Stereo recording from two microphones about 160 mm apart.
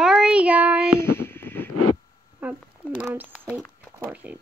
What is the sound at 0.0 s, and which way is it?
Child singing, 5° right (ahead or behind).